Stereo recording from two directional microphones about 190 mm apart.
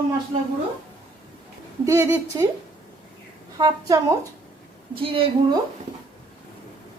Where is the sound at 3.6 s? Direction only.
20° right (ahead or behind).